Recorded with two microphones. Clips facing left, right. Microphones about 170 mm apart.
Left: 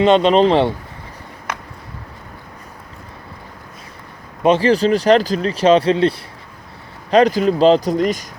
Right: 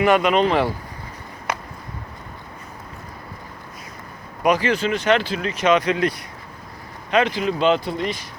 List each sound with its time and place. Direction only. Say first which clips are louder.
0.0 s speech: left 5 dB; 25° left (ahead or behind)
4.4 s speech: left 6 dB; 30° left (ahead or behind)